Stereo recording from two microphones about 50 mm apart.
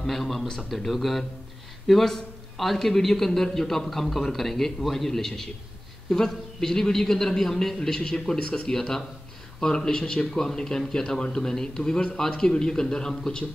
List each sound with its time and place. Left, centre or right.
0.0 s a man's voice: centre